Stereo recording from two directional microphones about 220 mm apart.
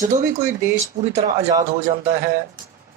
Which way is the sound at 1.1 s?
30° right (ahead or behind).